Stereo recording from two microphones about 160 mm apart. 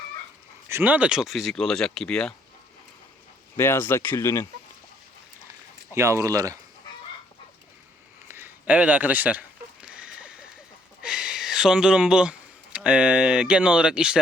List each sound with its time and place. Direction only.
0.7 s speech: 10° right (ahead or behind); by 2.3 s 5° left (ahead or behind)
3.6 s speech: 15° left (ahead or behind)
5.9 s speech: 15° right (ahead or behind)
8.3 s a sound: 15° right (ahead or behind)
11.0 s speech: 5° right (ahead or behind)